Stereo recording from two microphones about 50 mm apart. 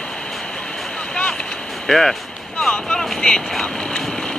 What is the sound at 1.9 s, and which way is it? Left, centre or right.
Speech, centre.